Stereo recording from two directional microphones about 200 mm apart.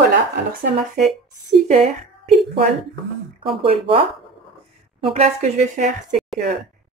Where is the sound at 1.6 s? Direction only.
35° right (ahead or behind).